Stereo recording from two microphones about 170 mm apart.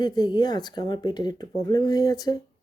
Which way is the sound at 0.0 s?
25° left (ahead or behind).